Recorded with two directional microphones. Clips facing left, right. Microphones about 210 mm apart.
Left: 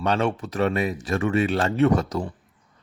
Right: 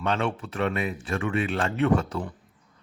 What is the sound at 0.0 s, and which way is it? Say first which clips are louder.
Speech: left 4 dB; 40° left (ahead or behind).